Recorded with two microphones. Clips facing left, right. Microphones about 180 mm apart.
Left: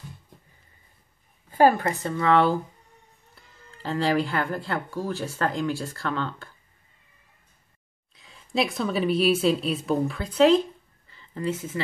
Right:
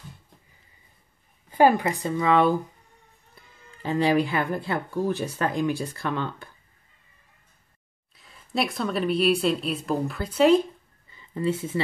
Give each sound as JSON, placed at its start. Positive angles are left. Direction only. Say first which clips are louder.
{"t": 1.6, "sound": "speech", "louder": "even", "side_deg": -15}
{"t": 3.7, "sound": "speech", "louder": "right 2 dB", "side_deg": -15}
{"t": 8.1, "sound": "a woman's voice", "louder": "left 1 dB", "side_deg": 0}
{"t": 11.1, "sound": "a sound", "louder": "right 3 dB", "side_deg": -15}